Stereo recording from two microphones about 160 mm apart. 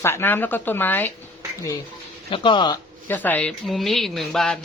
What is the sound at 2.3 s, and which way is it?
Speech, 30° left (ahead or behind).